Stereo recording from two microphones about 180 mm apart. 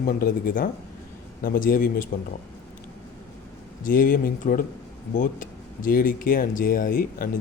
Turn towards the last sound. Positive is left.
turn(degrees=50)  # may be behind; listen again after turning